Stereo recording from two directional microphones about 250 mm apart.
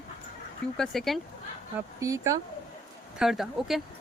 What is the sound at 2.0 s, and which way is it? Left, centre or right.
Speech, centre.